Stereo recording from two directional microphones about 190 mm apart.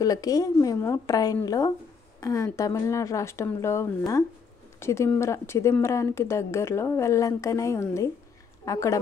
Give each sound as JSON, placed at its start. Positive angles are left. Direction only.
{"t": 0.0, "sound": "a woman's voice", "side_deg": 20}